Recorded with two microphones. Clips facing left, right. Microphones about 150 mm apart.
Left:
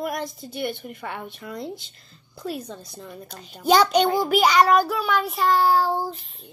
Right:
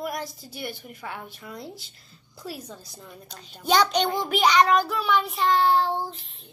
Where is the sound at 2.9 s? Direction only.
Centre (ahead or behind).